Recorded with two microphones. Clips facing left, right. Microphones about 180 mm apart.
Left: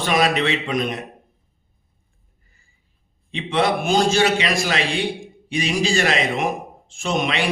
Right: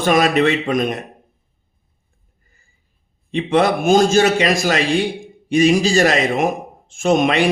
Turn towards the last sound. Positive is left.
turn(degrees=-45)  # may be behind; listen again after turning